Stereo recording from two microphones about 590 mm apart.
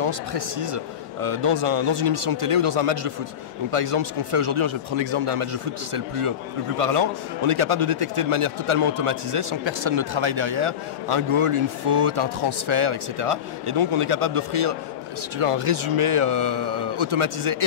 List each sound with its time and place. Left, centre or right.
0.0 s a man's voice: right